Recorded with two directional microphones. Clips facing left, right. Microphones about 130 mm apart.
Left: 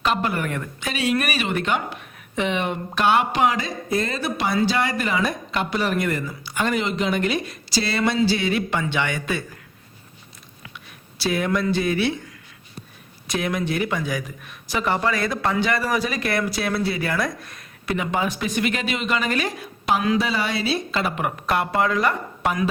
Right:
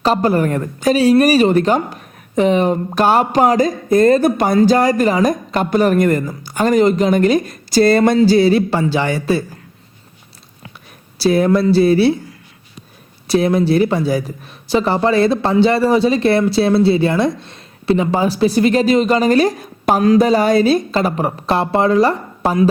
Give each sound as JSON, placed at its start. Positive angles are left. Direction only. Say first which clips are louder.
{"t": 0.0, "sound": "speech", "louder": "right 9 dB", "side_deg": -35}
{"t": 11.2, "sound": "speech", "louder": "right 9 dB", "side_deg": -35}
{"t": 13.2, "sound": "speech", "louder": "right 11 dB", "side_deg": -35}